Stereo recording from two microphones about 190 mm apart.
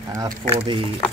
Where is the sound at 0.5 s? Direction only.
25° right (ahead or behind).